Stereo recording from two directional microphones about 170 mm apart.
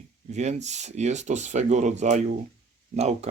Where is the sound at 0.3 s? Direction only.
40° right (ahead or behind).